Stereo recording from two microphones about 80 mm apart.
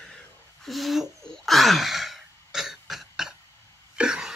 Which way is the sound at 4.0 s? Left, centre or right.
Centre.